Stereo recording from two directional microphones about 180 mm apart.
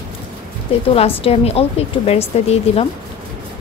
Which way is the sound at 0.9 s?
30° left (ahead or behind).